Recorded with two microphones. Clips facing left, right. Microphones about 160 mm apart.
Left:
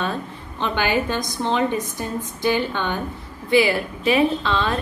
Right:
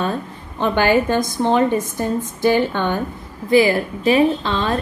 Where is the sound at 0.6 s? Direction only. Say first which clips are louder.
Right 6 dB; 50° right (ahead or behind).